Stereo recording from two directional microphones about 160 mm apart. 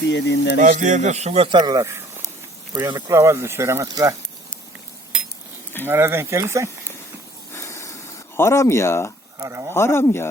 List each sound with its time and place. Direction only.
0.1 s speech: 90° left
0.6 s a man's voice: 55° right (ahead or behind); by 4.1 s 20° right (ahead or behind)
5.8 s speech: 15° right (ahead or behind)
7.5 s hiss: 15° left (ahead or behind)
8.4 s speech: 15° left (ahead or behind)
9.4 s speech: 20° right (ahead or behind)
9.7 s speech: 15° left (ahead or behind)